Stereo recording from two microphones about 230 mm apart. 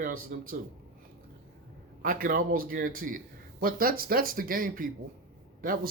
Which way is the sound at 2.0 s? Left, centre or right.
Right.